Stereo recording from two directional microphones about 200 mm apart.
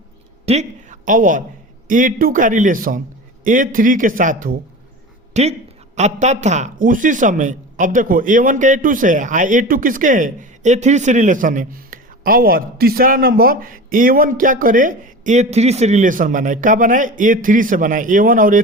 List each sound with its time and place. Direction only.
0.4 s a woman's voice: 35° right (ahead or behind)